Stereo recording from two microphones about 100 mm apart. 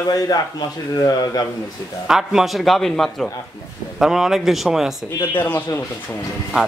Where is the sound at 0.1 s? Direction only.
40° left (ahead or behind).